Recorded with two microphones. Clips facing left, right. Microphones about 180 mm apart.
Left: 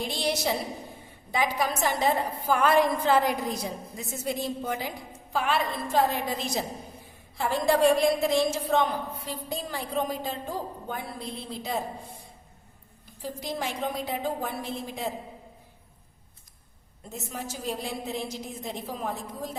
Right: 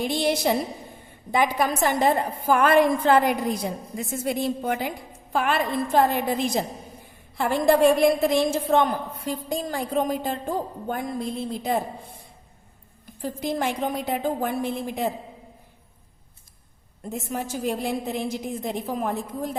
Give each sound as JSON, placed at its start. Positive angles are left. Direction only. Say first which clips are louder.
{"t": 0.1, "sound": "a woman's voice", "louder": "right 5 dB", "side_deg": -55}
{"t": 13.2, "sound": "a woman's voice", "louder": "right 6 dB", "side_deg": -55}
{"t": 17.1, "sound": "a woman's voice", "louder": "right 7 dB", "side_deg": -55}